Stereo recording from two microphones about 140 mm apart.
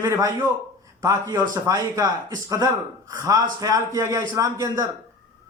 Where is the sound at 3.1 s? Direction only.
25° right (ahead or behind).